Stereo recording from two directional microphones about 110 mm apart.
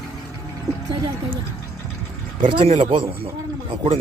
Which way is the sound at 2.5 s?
55° right (ahead or behind).